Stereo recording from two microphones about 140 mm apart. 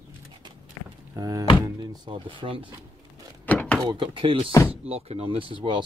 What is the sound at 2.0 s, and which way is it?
Speech, 35° right (ahead or behind).